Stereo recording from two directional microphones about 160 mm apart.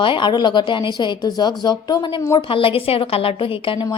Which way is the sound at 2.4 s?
35° left (ahead or behind).